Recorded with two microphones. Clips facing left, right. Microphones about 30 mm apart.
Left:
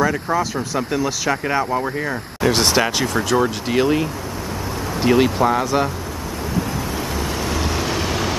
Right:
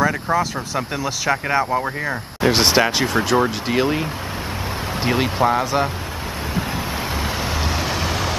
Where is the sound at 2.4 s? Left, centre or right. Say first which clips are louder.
Right 1 dB; centre.